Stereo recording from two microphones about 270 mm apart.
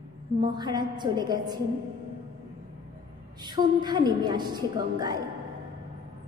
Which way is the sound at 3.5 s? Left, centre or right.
Centre.